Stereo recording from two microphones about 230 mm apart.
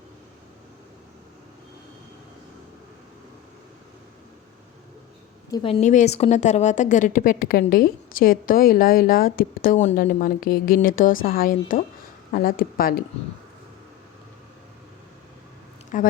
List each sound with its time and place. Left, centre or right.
5.5 s a woman's voice: left
15.9 s a woman's voice: left